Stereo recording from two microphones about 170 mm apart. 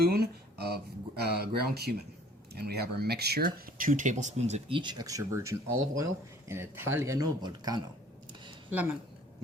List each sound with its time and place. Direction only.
0.1 s speech: 70° right (ahead or behind); by 4.8 s 40° right (ahead or behind)
4.8 s speech: 25° right (ahead or behind)
8.7 s speech: 10° right (ahead or behind)